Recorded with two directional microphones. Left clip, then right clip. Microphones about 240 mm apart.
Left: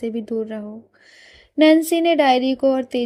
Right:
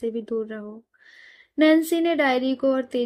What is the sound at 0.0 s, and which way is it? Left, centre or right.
Speech, left.